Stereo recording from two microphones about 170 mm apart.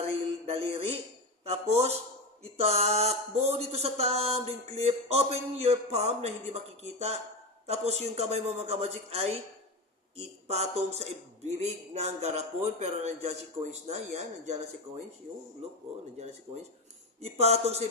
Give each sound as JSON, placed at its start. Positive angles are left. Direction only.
{"t": 0.1, "sound": "a sound", "side_deg": -35}
{"t": 1.5, "sound": "speech", "side_deg": -40}
{"t": 7.7, "sound": "speech", "side_deg": -40}
{"t": 17.2, "sound": "speech", "side_deg": -40}